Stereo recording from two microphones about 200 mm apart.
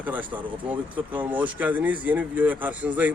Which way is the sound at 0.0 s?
10° right (ahead or behind).